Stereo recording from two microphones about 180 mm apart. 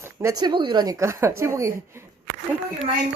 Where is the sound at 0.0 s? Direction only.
15° right (ahead or behind).